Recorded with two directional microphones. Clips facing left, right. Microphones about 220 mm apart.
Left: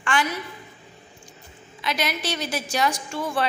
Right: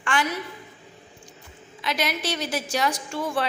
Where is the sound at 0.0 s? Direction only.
40° right (ahead or behind).